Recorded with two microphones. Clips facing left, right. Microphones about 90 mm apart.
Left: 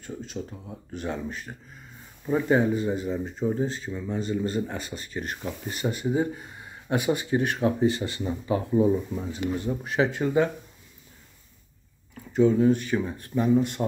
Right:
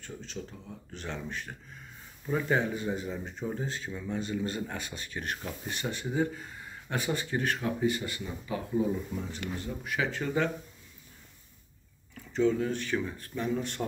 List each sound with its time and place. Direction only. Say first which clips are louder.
0.0 s speech: left 6 dB; 5° left (ahead or behind)
7.6 s speech: left 6 dB; 30° left (ahead or behind)
8.2 s speech: left 9 dB; 40° left (ahead or behind)
10.1 s speech: left 5 dB; 20° left (ahead or behind)
12.3 s speech: left 7 dB; 15° left (ahead or behind)